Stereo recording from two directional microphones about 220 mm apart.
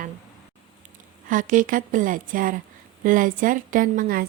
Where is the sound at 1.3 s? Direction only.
35° right (ahead or behind).